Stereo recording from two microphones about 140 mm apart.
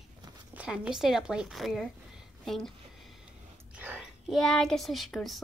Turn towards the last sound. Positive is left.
turn(degrees=0)  # may be behind; listen again after turning